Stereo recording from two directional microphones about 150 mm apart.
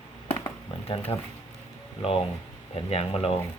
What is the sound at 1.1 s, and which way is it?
Speech, 30° left (ahead or behind).